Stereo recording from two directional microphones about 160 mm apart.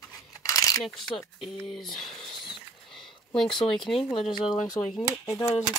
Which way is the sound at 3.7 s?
Centre (ahead or behind).